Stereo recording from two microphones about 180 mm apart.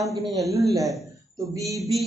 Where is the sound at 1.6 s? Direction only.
Centre (ahead or behind).